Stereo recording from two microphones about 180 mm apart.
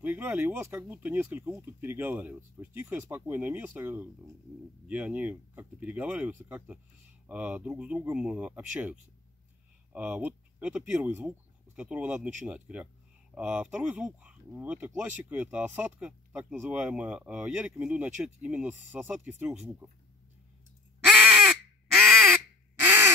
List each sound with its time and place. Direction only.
0.0 s speech: 10° right (ahead or behind)
9.9 s speech: 10° right (ahead or behind)
21.1 s a sound: 5° right (ahead or behind)
22.8 s crow: 10° right (ahead or behind)